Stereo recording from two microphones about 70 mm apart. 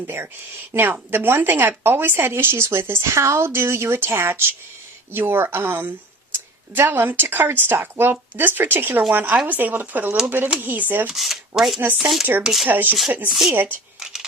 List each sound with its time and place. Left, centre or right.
0.7 s speech: right
11.0 s speech: centre
12.6 s speech: right
14.0 s a sound: centre